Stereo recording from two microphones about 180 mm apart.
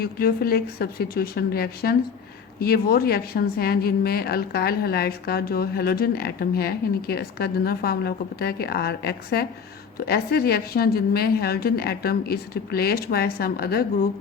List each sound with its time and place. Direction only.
0.0 s a woman's voice: 55° left (ahead or behind)